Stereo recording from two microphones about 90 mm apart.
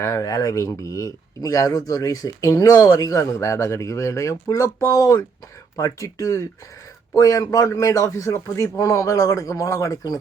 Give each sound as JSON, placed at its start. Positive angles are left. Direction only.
{"t": 0.0, "sound": "speech", "side_deg": 40}